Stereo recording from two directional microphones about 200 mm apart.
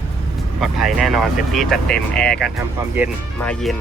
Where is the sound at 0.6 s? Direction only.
Centre (ahead or behind).